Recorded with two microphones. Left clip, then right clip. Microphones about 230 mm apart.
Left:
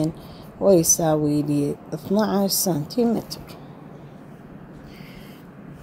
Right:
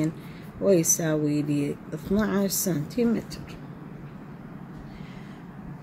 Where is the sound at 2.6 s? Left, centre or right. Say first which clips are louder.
Left 4 dB; centre.